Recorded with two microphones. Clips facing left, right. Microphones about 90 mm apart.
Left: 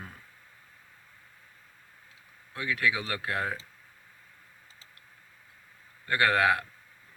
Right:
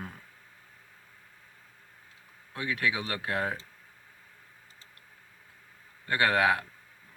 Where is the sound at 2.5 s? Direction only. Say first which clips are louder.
Left 1 dB; 25° right (ahead or behind).